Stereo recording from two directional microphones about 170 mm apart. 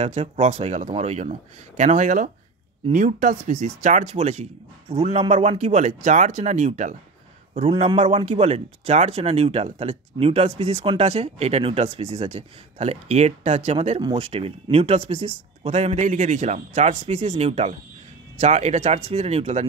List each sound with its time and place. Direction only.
0.0 s speech: 40° right (ahead or behind)